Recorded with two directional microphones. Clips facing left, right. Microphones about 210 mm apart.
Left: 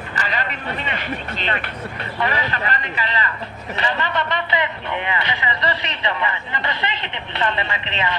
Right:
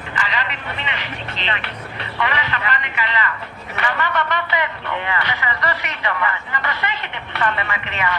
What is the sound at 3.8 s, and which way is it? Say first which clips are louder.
A man's voice: right 1 dB; 25° left (ahead or behind).